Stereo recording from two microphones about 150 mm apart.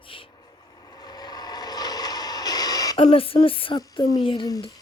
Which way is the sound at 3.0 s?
40° left (ahead or behind).